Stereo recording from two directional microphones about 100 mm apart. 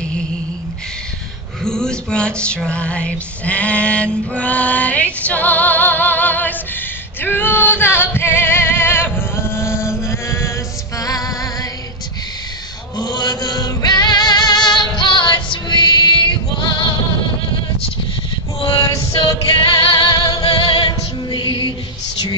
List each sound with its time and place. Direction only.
1.6 s music: 5° left (ahead or behind)
7.2 s female singing: 20° left (ahead or behind)
11.0 s music: 35° left (ahead or behind)
13.0 s music: 40° left (ahead or behind)
18.6 s a capella: 55° left (ahead or behind); by 20.4 s 40° left (ahead or behind)
20.6 s music: 60° left (ahead or behind)
20.9 s music: 50° left (ahead or behind)